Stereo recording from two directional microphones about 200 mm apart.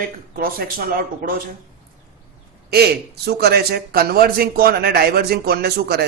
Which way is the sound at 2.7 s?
55° right (ahead or behind).